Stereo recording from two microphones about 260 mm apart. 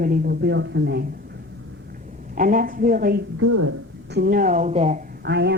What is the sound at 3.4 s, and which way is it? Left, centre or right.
Speech, right.